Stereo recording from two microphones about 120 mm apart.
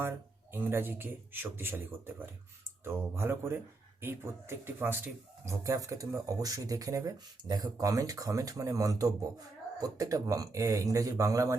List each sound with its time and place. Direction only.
0.5 s speech: 20° right (ahead or behind)